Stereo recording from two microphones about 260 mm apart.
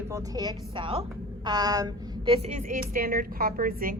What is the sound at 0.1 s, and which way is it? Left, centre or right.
A woman's voice, centre.